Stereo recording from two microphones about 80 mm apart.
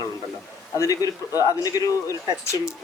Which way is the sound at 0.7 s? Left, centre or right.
Left.